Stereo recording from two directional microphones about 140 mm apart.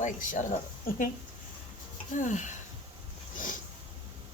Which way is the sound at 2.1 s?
60° left (ahead or behind).